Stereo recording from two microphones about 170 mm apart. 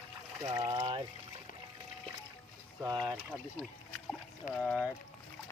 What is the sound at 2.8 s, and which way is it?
Speech, 15° right (ahead or behind).